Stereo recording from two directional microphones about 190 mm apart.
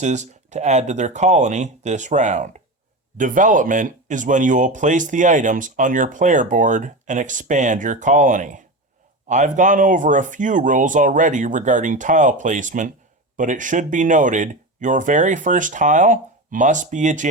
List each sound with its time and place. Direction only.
0.0 s speech: 40° right (ahead or behind)